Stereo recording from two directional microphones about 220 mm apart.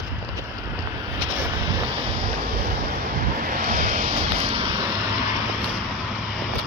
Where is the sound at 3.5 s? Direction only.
35° right (ahead or behind).